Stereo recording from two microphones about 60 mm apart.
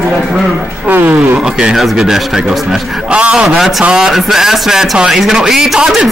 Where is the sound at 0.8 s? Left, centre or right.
Right.